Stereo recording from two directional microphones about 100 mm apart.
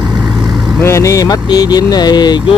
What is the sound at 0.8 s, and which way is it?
Speech, 30° left (ahead or behind).